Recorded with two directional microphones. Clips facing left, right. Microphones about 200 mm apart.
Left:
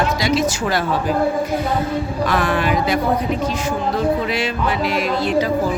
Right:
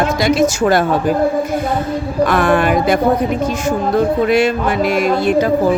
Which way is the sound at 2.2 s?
50° right (ahead or behind).